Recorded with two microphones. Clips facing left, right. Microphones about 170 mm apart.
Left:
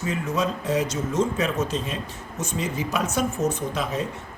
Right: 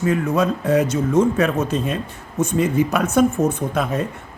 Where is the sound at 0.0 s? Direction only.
55° right (ahead or behind).